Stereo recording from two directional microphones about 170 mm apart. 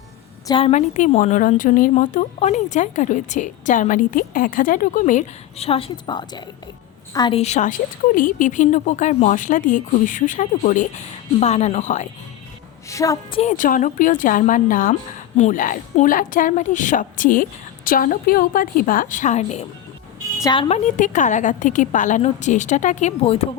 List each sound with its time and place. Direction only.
0.4 s a woman's voice: 30° left (ahead or behind)
0.7 s a woman's voice: 45° left (ahead or behind); by 7.3 s 20° left (ahead or behind)
7.3 s speech: 40° left (ahead or behind)
12.9 s a woman's voice: 20° left (ahead or behind)
13.3 s speech: 40° left (ahead or behind)
20.4 s a woman's voice: 25° left (ahead or behind)
20.7 s speech: 45° left (ahead or behind)